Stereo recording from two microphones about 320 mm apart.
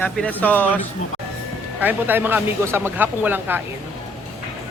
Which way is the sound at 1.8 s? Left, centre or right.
Centre.